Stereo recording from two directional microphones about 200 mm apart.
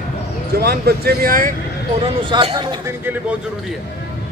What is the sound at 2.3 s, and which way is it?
Speech, 25° right (ahead or behind).